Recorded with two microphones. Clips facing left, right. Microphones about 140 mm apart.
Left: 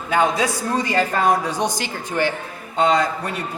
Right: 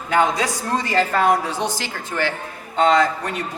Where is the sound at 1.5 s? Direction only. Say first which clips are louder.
Left 2 dB; 15° left (ahead or behind).